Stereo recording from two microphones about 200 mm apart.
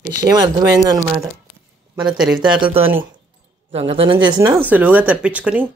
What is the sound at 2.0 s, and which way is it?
Speech, 5° right (ahead or behind).